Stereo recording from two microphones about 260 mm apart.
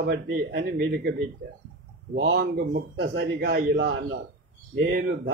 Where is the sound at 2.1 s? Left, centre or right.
Right.